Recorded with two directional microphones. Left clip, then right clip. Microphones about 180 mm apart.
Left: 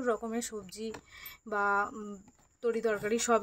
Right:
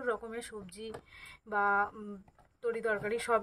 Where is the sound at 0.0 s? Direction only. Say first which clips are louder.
Left 3 dB; 40° left (ahead or behind).